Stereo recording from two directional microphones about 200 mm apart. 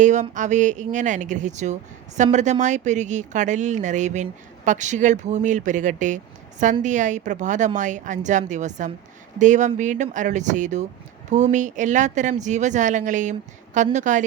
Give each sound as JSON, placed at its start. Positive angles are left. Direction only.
{"t": 0.0, "sound": "speech", "side_deg": -35}